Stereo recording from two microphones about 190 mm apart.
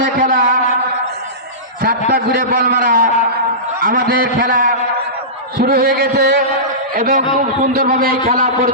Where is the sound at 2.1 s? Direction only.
50° right (ahead or behind).